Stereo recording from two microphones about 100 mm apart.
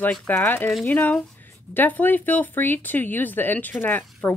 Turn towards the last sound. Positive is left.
turn(degrees=20)  # may be behind; listen again after turning